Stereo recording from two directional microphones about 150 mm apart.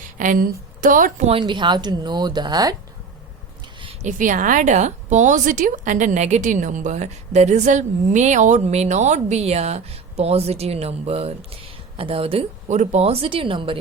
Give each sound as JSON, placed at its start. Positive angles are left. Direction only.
{"t": 0.2, "sound": "a woman's voice", "side_deg": -60}
{"t": 1.3, "sound": "a woman's voice", "side_deg": -35}
{"t": 4.0, "sound": "a woman's voice", "side_deg": -60}
{"t": 12.6, "sound": "a woman's voice", "side_deg": -50}